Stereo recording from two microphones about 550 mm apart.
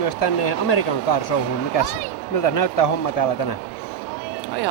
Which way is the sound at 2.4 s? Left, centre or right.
Left.